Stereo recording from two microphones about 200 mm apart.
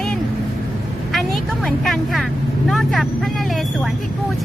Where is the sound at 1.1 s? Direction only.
Centre (ahead or behind).